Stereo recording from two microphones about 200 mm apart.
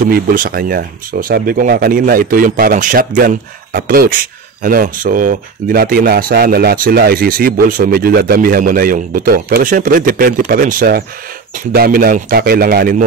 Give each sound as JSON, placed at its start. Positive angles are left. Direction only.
{"t": 0.0, "sound": "speech", "side_deg": -45}